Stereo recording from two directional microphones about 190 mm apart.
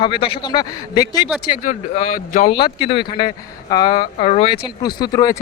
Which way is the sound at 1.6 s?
45° left (ahead or behind).